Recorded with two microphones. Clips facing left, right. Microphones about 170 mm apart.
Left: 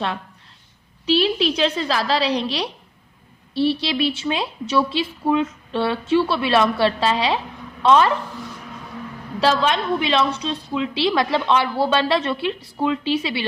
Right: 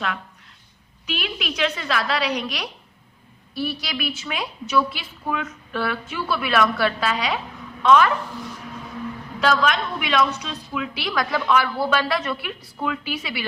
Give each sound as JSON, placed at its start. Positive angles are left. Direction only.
{"t": 1.0, "sound": "a woman's voice", "side_deg": 30}
{"t": 9.4, "sound": "a woman's voice", "side_deg": 30}